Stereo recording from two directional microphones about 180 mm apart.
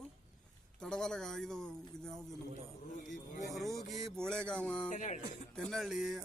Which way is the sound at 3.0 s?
45° left (ahead or behind).